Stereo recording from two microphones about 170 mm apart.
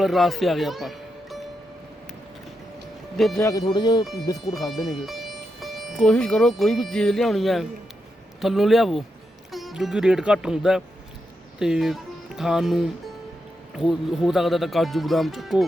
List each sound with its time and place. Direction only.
0.0 s speech: centre (ahead or behind)
3.2 s speech: centre (ahead or behind)
3.7 s speech: 25° left (ahead or behind)
4.7 s speech: centre (ahead or behind)